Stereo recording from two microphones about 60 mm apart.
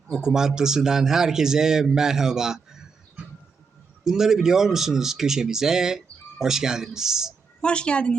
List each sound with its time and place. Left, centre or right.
0.1 s speech: centre
4.0 s speech: centre
7.6 s a woman's voice: centre